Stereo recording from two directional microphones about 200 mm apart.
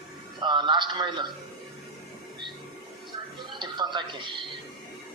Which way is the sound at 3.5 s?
20° right (ahead or behind).